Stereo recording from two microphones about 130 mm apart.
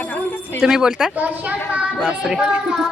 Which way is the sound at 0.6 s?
5° right (ahead or behind).